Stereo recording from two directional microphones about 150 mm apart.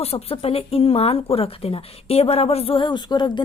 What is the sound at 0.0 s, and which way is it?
Speech, 40° left (ahead or behind).